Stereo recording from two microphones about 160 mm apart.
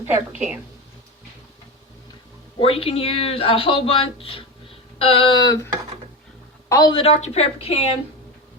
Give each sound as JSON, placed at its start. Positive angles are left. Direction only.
{"t": 0.0, "sound": "a woman's voice", "side_deg": -15}
{"t": 2.6, "sound": "speech", "side_deg": 35}
{"t": 6.7, "sound": "a woman's voice", "side_deg": 20}
{"t": 6.9, "sound": "speech", "side_deg": 40}